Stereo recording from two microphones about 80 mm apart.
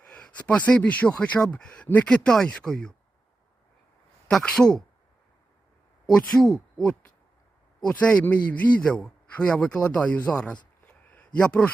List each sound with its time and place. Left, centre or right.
0.0 s speech: centre
4.4 s speech: centre
6.1 s speech: centre